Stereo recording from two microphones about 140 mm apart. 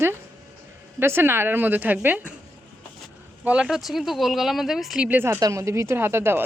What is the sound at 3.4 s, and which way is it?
Speech, 5° right (ahead or behind).